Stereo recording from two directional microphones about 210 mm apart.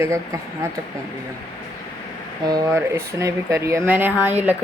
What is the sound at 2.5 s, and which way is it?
Speech, 15° right (ahead or behind).